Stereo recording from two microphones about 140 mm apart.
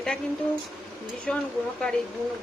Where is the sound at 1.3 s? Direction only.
5° left (ahead or behind).